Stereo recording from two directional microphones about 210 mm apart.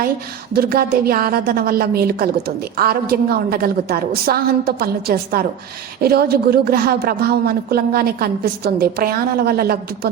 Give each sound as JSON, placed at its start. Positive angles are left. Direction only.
{"t": 0.5, "sound": "a woman's voice", "side_deg": -45}